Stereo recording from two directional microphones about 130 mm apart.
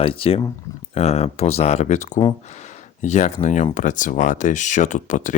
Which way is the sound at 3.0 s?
65° left (ahead or behind).